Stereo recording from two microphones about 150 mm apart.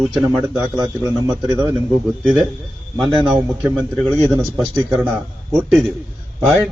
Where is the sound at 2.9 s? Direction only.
Centre (ahead or behind).